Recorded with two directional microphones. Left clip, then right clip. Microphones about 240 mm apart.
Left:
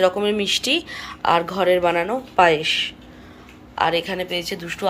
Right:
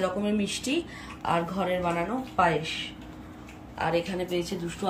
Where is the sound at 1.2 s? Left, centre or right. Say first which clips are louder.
Left 10 dB; left.